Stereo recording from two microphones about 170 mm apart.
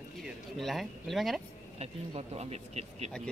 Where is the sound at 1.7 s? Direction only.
40° right (ahead or behind).